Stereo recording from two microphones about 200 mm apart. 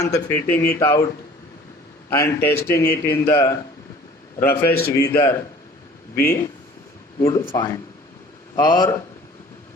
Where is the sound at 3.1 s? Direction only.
10° left (ahead or behind).